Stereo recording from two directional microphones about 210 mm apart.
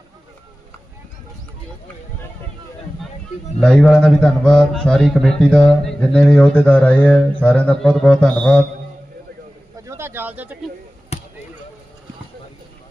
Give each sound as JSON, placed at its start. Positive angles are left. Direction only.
{"t": 3.6, "sound": "mantra", "side_deg": 5}
{"t": 9.8, "sound": "bird", "side_deg": -15}
{"t": 11.1, "sound": "basketball bounce", "side_deg": 30}